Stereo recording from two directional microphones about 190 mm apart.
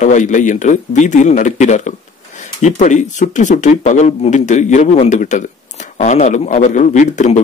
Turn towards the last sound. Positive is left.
turn(degrees=40)  # may be behind; listen again after turning